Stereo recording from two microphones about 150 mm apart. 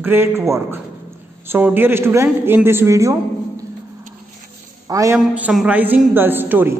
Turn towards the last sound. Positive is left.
turn(degrees=-15)  # may be behind; listen again after turning